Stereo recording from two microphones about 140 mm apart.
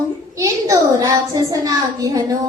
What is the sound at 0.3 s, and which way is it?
A child's voice, 25° right (ahead or behind).